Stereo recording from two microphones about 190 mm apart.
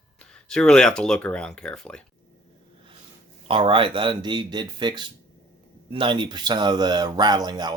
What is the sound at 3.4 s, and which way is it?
Speech, 30° right (ahead or behind).